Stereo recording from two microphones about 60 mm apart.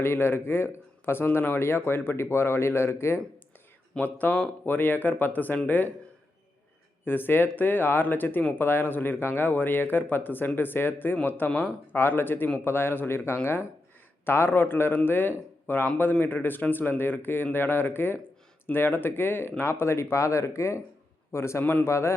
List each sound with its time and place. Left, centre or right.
0.0 s speech: left
4.0 s speech: left
7.0 s speech: left
21.6 s speech: left
21.8 s speech: left